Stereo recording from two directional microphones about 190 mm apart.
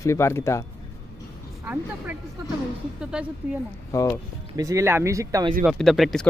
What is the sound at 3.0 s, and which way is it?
Speech, 5° right (ahead or behind).